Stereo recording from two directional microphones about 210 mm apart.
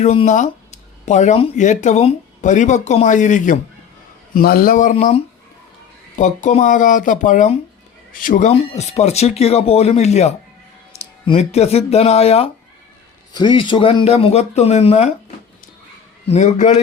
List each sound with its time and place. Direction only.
0.0 s speech: 30° left (ahead or behind)
16.2 s speech: 30° left (ahead or behind)